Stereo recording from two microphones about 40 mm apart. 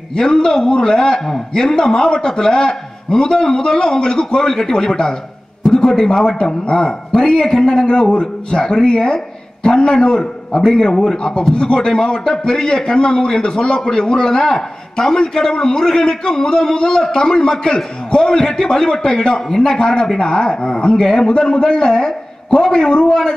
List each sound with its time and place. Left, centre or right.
0.1 s a man's voice: centre